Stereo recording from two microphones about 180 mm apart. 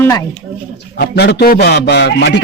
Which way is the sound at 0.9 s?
65° left (ahead or behind).